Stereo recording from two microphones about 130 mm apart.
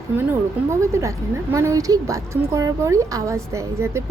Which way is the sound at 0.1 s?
10° right (ahead or behind).